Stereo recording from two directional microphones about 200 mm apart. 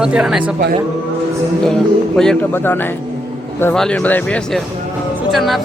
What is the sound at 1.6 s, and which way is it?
Speech, 5° left (ahead or behind).